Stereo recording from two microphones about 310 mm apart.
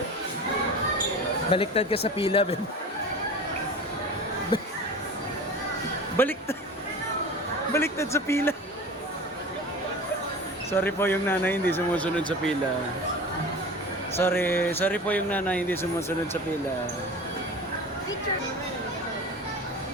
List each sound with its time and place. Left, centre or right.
1.5 s speech: centre
6.1 s speech: centre
7.7 s speech: centre
10.7 s speech: centre
14.2 s speech: centre